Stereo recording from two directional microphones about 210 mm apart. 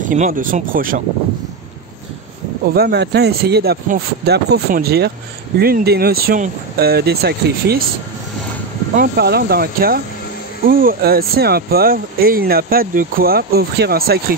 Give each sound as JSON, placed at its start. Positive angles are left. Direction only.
{"t": 0.0, "sound": "speech", "side_deg": -40}
{"t": 2.6, "sound": "speech", "side_deg": -45}
{"t": 8.9, "sound": "speech", "side_deg": -45}